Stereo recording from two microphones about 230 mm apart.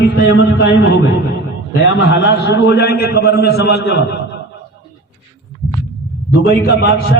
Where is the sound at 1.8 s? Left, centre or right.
Left.